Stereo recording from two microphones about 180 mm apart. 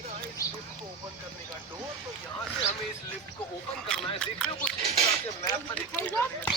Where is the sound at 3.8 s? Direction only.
5° left (ahead or behind).